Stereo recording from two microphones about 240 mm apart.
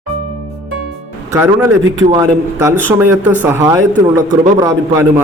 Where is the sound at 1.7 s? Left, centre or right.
Right.